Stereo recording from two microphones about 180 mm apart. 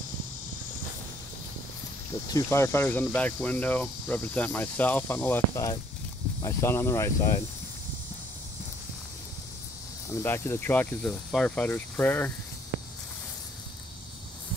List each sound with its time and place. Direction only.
2.3 s speech: 15° left (ahead or behind)
10.0 s speech: 15° left (ahead or behind)